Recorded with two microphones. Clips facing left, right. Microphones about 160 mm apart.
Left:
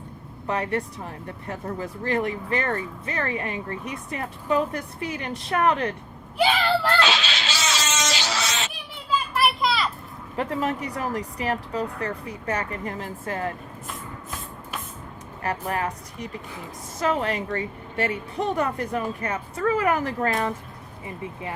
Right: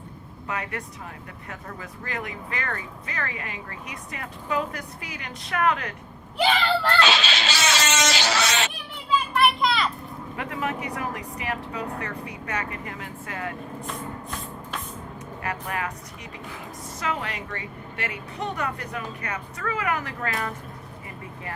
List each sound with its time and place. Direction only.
0.4 s speech: 35° left (ahead or behind)
6.3 s a sound: 10° left (ahead or behind)
7.1 s music: 65° right (ahead or behind)
9.0 s children playing: centre (ahead or behind)
10.3 s speech: 35° left (ahead or behind)
13.8 s spray: 5° left (ahead or behind)
15.4 s speech: 35° left (ahead or behind)
17.0 s speech: 40° left (ahead or behind)